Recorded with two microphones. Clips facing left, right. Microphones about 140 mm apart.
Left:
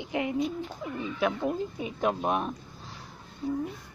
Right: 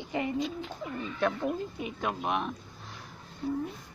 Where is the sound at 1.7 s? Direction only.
30° left (ahead or behind).